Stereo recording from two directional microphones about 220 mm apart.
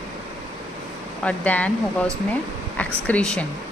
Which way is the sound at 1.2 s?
5° left (ahead or behind).